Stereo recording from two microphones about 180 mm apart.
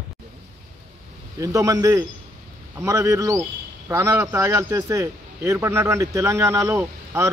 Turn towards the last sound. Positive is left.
turn(degrees=-15)  # may be behind; listen again after turning